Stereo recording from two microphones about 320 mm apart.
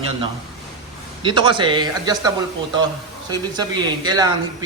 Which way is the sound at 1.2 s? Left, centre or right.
Centre.